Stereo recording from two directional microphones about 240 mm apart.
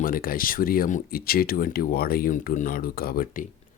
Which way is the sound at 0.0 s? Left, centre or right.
Left.